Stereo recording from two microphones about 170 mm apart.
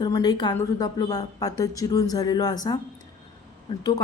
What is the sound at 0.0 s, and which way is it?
A woman's voice, 25° left (ahead or behind).